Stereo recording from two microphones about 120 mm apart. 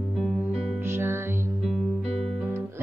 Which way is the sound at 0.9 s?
20° right (ahead or behind).